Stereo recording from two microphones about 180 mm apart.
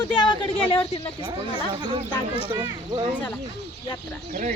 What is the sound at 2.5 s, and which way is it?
Speech, 25° right (ahead or behind).